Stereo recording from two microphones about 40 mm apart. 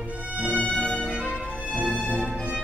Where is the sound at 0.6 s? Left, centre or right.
Left.